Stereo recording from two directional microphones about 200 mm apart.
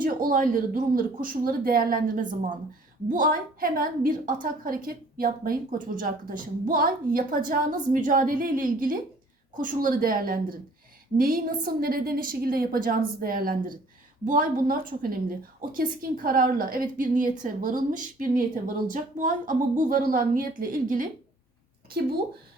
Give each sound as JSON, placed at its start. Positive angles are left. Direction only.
{"t": 0.0, "sound": "a woman's voice", "side_deg": -45}